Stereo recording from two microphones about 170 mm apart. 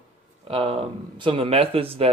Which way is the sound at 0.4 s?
35° right (ahead or behind).